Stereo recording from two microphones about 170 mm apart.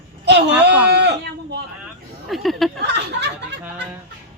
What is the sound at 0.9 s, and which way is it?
Speech, 85° right.